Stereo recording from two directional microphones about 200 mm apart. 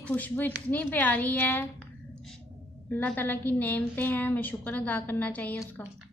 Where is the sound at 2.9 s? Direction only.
10° left (ahead or behind).